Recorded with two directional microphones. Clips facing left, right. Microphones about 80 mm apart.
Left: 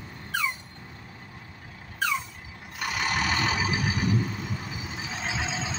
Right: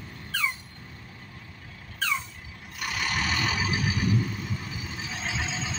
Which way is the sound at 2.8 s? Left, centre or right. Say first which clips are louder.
Left 2 dB; left.